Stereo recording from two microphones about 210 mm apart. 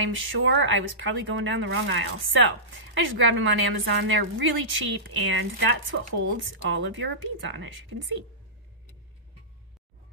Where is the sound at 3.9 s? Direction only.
60° right (ahead or behind).